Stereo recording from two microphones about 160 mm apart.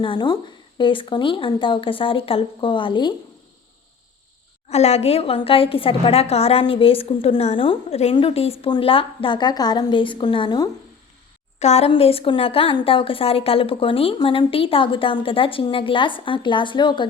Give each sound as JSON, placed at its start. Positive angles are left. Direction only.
{"t": 0.0, "sound": "a woman's voice", "side_deg": 30}
{"t": 4.7, "sound": "a woman's voice", "side_deg": 40}
{"t": 11.6, "sound": "a woman's voice", "side_deg": 40}